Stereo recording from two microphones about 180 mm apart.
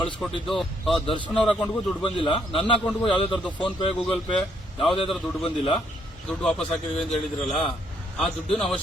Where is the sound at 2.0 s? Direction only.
30° left (ahead or behind).